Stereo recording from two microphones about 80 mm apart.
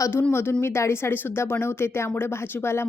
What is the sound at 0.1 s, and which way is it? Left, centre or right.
Speech, left.